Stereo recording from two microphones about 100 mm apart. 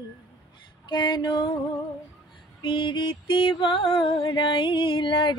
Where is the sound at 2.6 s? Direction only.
55° left (ahead or behind).